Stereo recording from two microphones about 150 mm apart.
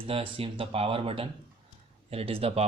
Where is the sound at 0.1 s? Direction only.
40° right (ahead or behind).